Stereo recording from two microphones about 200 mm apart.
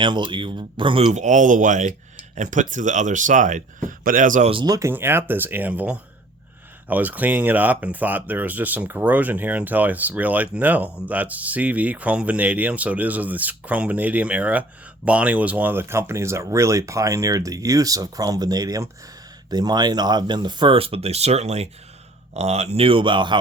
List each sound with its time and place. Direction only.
0.0 s speech: 25° right (ahead or behind)
4.6 s speech: 15° right (ahead or behind)